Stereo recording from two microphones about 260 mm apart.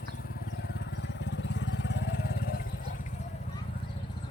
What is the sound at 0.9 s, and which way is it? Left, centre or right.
Vehicle, left.